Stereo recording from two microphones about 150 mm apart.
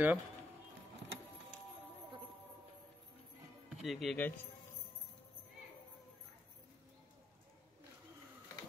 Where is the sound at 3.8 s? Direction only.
Centre (ahead or behind).